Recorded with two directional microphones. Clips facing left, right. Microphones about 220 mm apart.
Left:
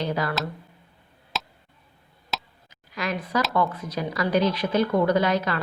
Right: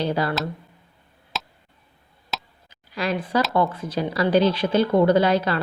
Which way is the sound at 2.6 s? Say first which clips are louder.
Right 4 dB; 30° right (ahead or behind).